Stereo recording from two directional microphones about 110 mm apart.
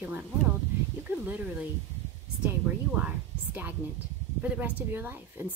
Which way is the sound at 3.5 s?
20° right (ahead or behind).